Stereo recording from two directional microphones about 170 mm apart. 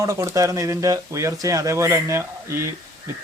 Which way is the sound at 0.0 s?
20° right (ahead or behind).